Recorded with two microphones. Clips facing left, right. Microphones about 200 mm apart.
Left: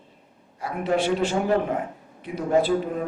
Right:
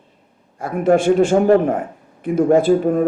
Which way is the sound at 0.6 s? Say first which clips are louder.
Right 8 dB; 50° right (ahead or behind).